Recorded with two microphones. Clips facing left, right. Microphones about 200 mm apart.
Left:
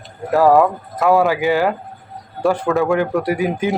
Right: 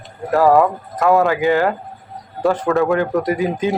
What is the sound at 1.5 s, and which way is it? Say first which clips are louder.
Speech: right 1 dB; 15° left (ahead or behind).